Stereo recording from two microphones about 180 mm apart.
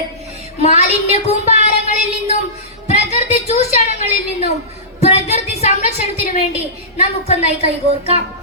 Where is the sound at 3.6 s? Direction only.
35° left (ahead or behind).